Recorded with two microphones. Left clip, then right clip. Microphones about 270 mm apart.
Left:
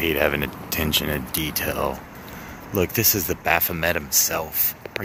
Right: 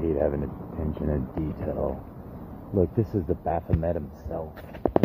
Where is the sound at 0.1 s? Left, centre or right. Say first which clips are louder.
Left 5 dB; left.